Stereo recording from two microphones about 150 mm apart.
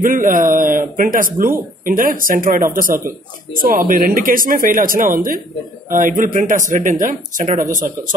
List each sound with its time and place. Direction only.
0.0 s speech: 65° right (ahead or behind)